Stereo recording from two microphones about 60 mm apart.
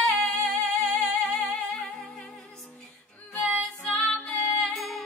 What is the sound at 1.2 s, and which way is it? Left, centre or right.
Music, left.